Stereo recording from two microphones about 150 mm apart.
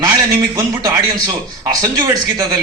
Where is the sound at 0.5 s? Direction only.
25° right (ahead or behind).